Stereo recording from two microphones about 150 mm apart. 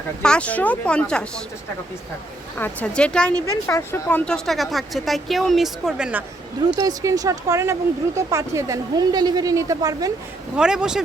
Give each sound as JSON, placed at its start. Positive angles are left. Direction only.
{"t": 0.2, "sound": "speech", "side_deg": 5}
{"t": 2.6, "sound": "speech", "side_deg": 10}
{"t": 3.4, "sound": "speech", "side_deg": 20}
{"t": 4.3, "sound": "speech", "side_deg": 0}
{"t": 6.7, "sound": "speech", "side_deg": -25}
{"t": 10.6, "sound": "speech", "side_deg": -5}